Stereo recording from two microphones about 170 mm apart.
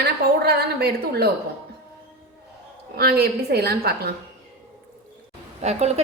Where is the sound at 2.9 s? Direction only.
70° right (ahead or behind).